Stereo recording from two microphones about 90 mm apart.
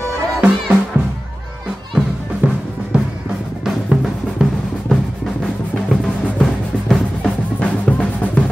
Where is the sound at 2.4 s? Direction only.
20° right (ahead or behind).